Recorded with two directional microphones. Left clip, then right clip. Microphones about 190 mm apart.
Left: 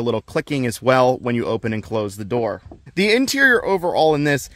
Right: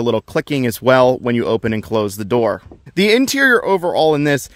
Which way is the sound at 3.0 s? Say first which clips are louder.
Right 3 dB; 20° right (ahead or behind).